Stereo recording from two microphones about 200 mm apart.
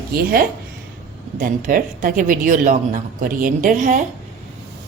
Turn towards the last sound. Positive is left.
turn(degrees=-40)  # may be behind; listen again after turning